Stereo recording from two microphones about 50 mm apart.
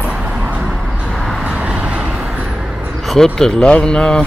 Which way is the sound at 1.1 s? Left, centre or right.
Centre.